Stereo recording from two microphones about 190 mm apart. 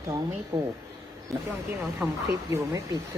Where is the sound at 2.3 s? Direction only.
15° right (ahead or behind).